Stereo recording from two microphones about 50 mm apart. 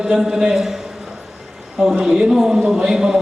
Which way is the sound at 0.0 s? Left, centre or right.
Centre.